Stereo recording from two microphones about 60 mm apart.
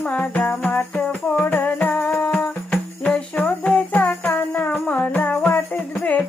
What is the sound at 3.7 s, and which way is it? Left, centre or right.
Music, left.